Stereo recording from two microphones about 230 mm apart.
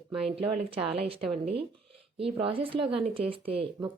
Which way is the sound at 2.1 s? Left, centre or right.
Right.